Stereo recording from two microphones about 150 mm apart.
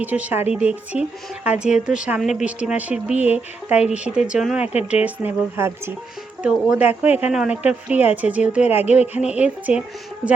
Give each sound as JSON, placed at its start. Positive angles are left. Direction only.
{"t": 0.0, "sound": "a woman's voice", "side_deg": -10}